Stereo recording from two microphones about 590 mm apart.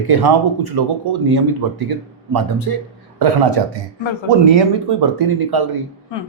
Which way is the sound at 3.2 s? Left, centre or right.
Right.